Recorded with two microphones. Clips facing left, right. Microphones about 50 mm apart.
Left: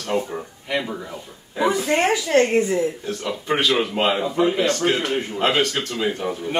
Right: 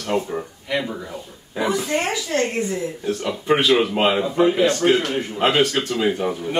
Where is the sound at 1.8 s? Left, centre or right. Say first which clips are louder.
Left 3 dB; left.